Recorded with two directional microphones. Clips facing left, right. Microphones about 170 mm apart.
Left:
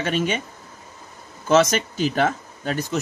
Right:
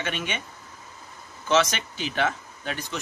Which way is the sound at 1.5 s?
40° left (ahead or behind).